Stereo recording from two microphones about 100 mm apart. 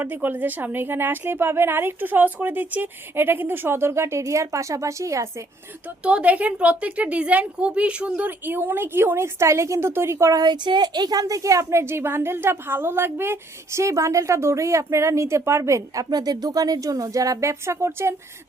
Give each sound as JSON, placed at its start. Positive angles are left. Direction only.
{"t": 0.0, "sound": "a woman's voice", "side_deg": -20}
{"t": 6.0, "sound": "a woman's voice", "side_deg": -10}
{"t": 10.4, "sound": "a woman's voice", "side_deg": -50}
{"t": 16.0, "sound": "speech", "side_deg": -45}